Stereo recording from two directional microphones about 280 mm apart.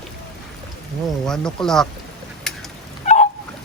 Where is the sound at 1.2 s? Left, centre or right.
Centre.